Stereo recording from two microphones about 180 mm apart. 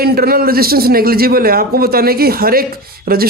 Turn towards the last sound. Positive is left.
turn(degrees=-55)  # may be behind; listen again after turning